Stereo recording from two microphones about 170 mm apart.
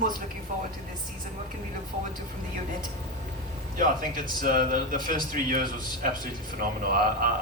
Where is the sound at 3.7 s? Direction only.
55° right (ahead or behind).